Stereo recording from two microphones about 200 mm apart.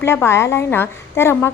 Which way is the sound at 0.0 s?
15° left (ahead or behind).